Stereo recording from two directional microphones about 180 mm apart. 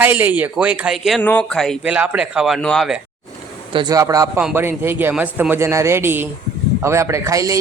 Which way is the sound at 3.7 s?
25° right (ahead or behind).